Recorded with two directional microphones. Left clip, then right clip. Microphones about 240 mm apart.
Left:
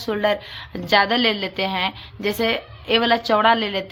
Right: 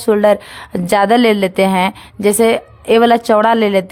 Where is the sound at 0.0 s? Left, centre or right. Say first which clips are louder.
Right 10 dB; right.